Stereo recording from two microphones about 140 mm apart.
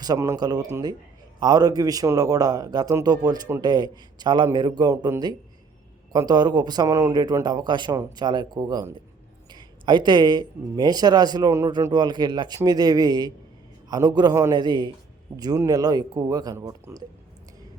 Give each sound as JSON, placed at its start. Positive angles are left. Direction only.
{"t": 0.0, "sound": "a man's voice", "side_deg": -25}
{"t": 6.1, "sound": "speech", "side_deg": -30}